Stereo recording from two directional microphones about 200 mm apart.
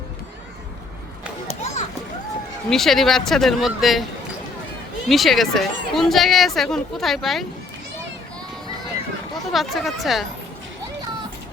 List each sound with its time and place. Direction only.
1.5 s children playing: 35° left (ahead or behind)
2.6 s speech: centre (ahead or behind)
5.0 s speech: centre (ahead or behind)
9.5 s speech: centre (ahead or behind)